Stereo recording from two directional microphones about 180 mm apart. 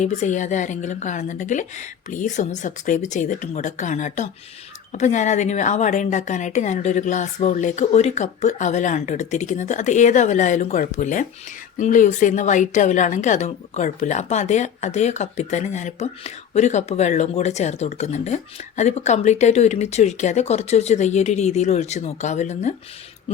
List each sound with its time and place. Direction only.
0.0 s a woman's voice: 40° left (ahead or behind)